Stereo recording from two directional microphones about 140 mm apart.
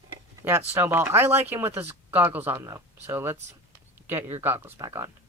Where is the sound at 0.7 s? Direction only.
15° right (ahead or behind).